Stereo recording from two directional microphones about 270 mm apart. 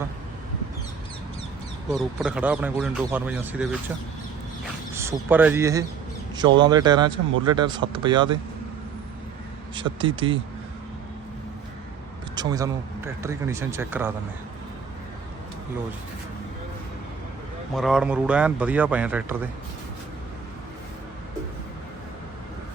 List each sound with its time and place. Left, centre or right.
1.9 s a man's voice: centre
4.9 s speech: centre
9.7 s speech: centre
12.4 s speech: centre
17.7 s a man's voice: centre